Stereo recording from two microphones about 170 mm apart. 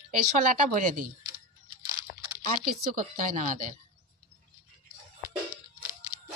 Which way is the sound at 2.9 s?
50° right (ahead or behind).